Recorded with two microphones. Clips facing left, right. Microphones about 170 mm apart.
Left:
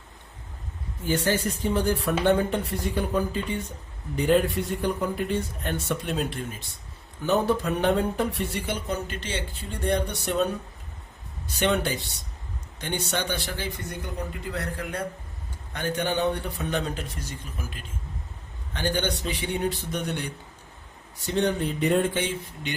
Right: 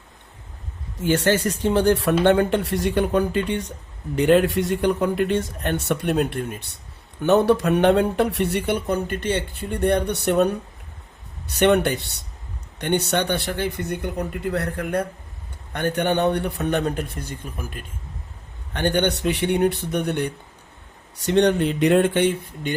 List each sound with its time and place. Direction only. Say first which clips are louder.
0.9 s speech: right 6 dB; 80° right; by 6.7 s 60° right (ahead or behind)
7.2 s speech: right 6 dB; 75° right (ahead or behind); by 20.3 s 60° right (ahead or behind)
21.2 s speech: right 7 dB; 80° right; by 22.7 s 60° right (ahead or behind)